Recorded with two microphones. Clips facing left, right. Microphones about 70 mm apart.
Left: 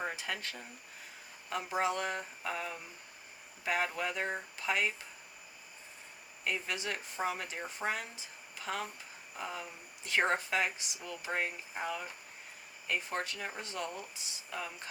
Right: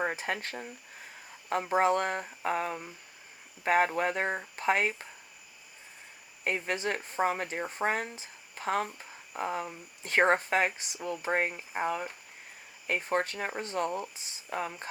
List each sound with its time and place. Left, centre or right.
0.0 s speech: right
6.4 s speech: right